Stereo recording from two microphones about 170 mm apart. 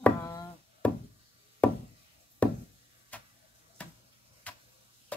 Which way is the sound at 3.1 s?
10° left (ahead or behind).